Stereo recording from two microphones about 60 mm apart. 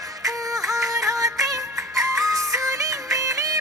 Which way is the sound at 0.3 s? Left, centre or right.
Right.